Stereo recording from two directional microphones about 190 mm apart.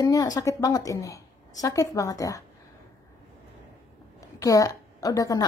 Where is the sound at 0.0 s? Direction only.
20° left (ahead or behind).